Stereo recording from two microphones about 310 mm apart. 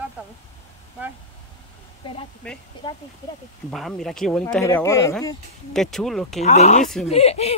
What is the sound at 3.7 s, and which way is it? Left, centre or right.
Speech, centre.